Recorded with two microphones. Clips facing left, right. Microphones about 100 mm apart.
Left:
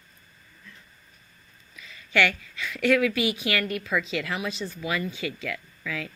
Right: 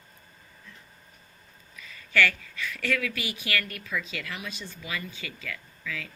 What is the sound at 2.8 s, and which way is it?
A woman's voice, 25° left (ahead or behind).